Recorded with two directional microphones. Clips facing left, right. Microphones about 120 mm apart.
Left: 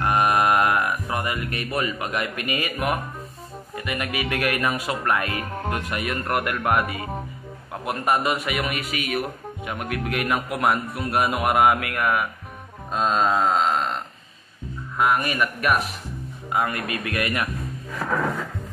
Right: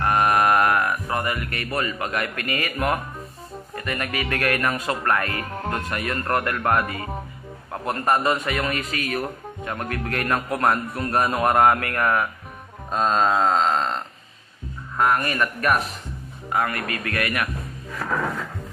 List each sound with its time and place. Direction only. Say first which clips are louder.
0.0 s speech: right 1 dB; 20° left (ahead or behind)
12.9 s a sound: right 1 dB; 5° left (ahead or behind)
15.0 s a man's voice: even; 10° left (ahead or behind)